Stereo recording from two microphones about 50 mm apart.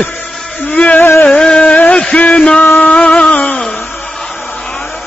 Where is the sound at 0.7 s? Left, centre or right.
Left.